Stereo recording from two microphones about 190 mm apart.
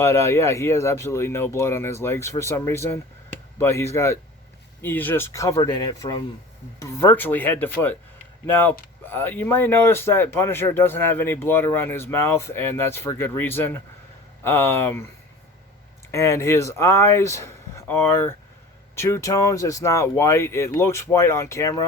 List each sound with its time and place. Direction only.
0.0 s speech: 15° left (ahead or behind)
16.1 s speech: 15° left (ahead or behind)